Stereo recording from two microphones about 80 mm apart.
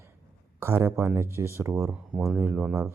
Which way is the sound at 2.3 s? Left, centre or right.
Right.